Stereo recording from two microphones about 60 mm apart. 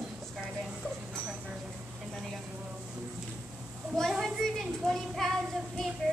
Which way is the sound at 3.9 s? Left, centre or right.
Centre.